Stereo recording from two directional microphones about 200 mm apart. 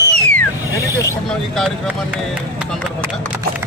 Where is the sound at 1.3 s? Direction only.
Centre (ahead or behind).